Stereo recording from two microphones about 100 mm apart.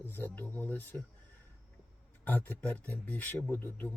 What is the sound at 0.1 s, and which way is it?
Speech, 20° left (ahead or behind).